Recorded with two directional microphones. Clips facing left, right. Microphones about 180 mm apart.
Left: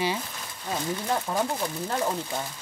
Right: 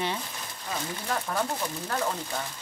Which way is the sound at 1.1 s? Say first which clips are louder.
Left 1 dB; 20° left (ahead or behind).